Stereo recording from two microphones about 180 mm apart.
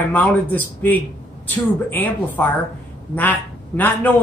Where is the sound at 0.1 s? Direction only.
10° left (ahead or behind).